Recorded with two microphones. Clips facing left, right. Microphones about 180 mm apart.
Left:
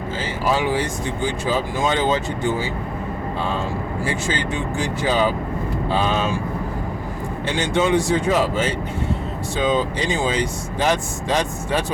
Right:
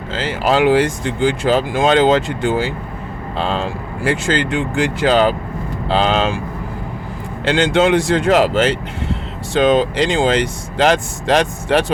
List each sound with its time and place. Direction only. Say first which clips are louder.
0.1 s speech: right 5 dB; 90° right
7.4 s speech: right 6 dB; 90° right